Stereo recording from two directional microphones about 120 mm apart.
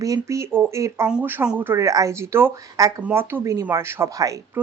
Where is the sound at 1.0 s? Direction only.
15° right (ahead or behind); by 4.4 s 30° right (ahead or behind).